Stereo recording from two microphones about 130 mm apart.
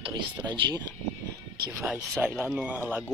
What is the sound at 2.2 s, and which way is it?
Speech, 10° right (ahead or behind).